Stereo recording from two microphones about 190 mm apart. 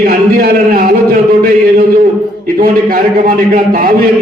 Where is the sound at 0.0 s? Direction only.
50° right (ahead or behind).